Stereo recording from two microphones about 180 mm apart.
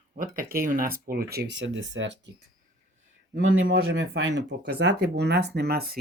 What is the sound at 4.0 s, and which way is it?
Speech, 80° right.